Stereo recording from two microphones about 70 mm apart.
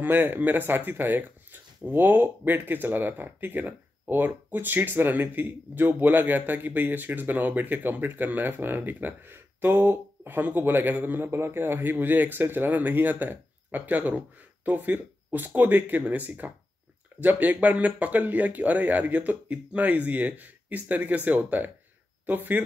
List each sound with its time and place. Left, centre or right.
0.0 s speech: right